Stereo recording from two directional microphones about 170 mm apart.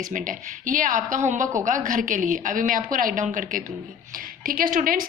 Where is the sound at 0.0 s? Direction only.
50° right (ahead or behind).